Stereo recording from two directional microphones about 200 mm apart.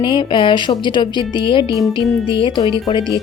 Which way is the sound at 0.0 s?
25° left (ahead or behind).